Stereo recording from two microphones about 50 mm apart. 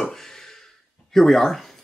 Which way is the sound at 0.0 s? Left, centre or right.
Centre.